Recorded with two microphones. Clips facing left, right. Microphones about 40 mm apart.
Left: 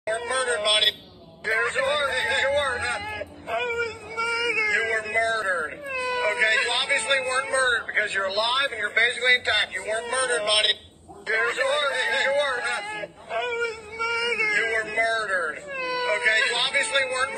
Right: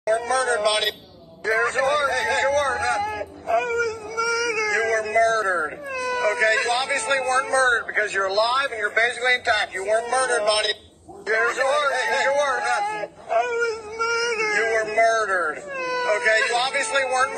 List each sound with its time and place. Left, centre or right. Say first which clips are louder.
0.0 s a man's voice: right 5 dB; left